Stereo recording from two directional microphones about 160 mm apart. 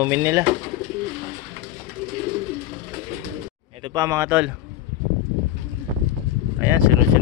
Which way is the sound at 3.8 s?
25° right (ahead or behind).